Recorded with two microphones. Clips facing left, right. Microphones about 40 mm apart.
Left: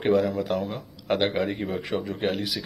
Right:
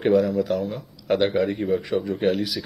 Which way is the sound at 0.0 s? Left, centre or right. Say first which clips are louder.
Right 3 dB; centre.